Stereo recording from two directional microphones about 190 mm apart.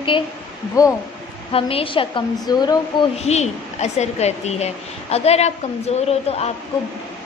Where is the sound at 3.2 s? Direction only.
35° left (ahead or behind).